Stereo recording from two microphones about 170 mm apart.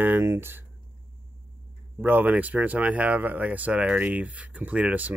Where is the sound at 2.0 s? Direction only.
10° right (ahead or behind).